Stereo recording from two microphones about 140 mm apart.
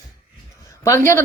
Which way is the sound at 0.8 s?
20° left (ahead or behind).